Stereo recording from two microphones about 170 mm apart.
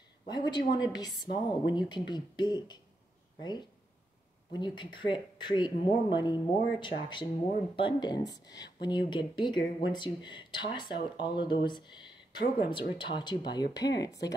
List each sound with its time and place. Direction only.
0.3 s speech: 25° left (ahead or behind)